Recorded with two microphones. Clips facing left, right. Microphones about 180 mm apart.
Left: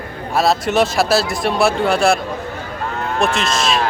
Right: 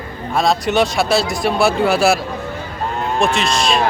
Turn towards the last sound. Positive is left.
turn(degrees=0)  # may be behind; listen again after turning